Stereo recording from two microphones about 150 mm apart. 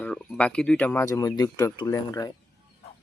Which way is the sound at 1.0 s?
20° left (ahead or behind).